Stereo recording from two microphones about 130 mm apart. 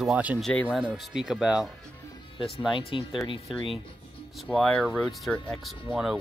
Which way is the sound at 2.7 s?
45° left (ahead or behind).